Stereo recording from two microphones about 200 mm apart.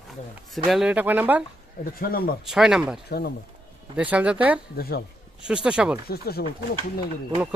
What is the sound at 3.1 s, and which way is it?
Speech, 55° left (ahead or behind).